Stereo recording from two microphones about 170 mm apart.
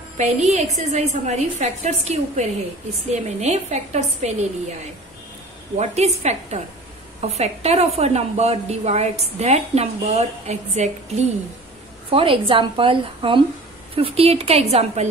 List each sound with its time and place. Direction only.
0.2 s a woman's voice: 40° right (ahead or behind)
5.8 s a woman's voice: 40° right (ahead or behind)